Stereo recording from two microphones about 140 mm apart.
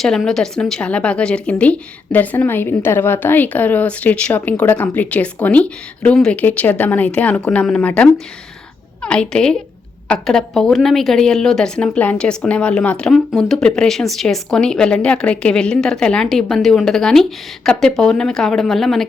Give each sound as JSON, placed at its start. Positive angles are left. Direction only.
{"t": 0.0, "sound": "a woman's voice", "side_deg": 0}